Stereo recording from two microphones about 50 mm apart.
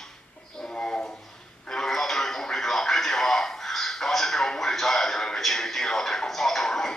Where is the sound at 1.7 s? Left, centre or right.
Centre.